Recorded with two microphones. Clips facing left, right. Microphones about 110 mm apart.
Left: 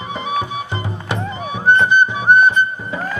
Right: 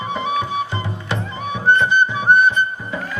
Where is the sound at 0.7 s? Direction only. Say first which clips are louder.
Left 1 dB; 20° left (ahead or behind).